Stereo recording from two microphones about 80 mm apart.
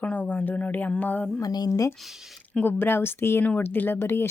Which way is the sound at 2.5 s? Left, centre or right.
Left.